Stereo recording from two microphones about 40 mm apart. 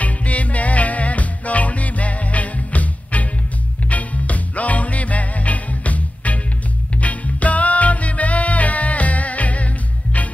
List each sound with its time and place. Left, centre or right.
0.0 s music: left